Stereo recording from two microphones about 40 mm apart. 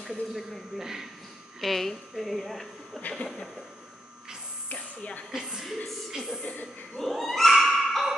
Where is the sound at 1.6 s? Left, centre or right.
Centre.